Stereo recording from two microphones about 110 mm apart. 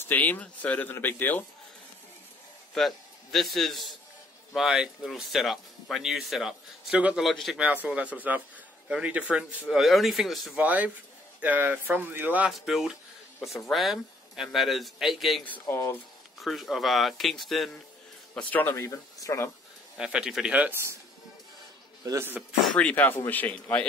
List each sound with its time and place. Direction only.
0.1 s speech: 15° left (ahead or behind)
2.7 s a man's voice: centre (ahead or behind)
7.0 s speech: 15° right (ahead or behind)
7.2 s speech: centre (ahead or behind)
7.6 s speech: 15° right (ahead or behind)
10.6 s speech: 15° right (ahead or behind)
12.4 s speech: centre (ahead or behind)
15.7 s speech: 20° left (ahead or behind)
16.3 s speech: centre (ahead or behind)
18.3 s speech: 10° left (ahead or behind)
18.8 s speech: 30° left (ahead or behind)
20.0 s speech: 10° right (ahead or behind)
22.0 s speech: 30° right (ahead or behind)
22.8 s speech: 15° left (ahead or behind)